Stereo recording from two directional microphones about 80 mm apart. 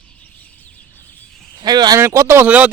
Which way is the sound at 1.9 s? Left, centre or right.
Right.